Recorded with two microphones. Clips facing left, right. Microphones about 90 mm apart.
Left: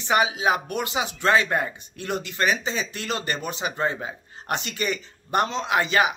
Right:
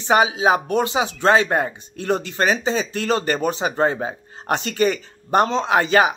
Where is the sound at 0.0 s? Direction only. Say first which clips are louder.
Right 5 dB; 30° right (ahead or behind).